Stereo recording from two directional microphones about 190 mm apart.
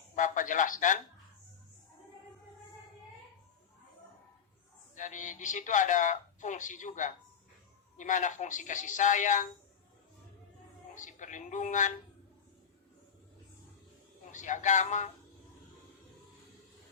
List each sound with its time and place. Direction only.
0.2 s a man's voice: 45° left (ahead or behind)
4.9 s speech: 40° left (ahead or behind)
10.9 s speech: 40° left (ahead or behind)
14.3 s speech: 40° left (ahead or behind)